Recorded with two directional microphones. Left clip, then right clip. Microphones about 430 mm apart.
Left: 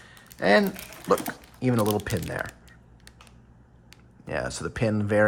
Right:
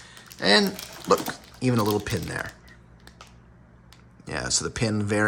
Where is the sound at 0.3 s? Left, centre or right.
Centre.